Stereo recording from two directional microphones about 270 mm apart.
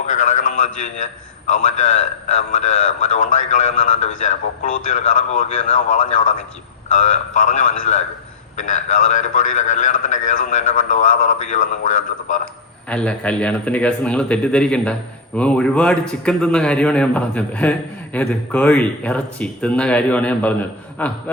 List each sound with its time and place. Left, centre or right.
0.0 s a man's voice: left
12.9 s a man's voice: centre